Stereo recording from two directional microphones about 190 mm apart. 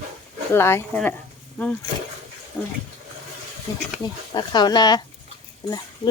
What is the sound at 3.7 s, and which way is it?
Speech, 15° left (ahead or behind).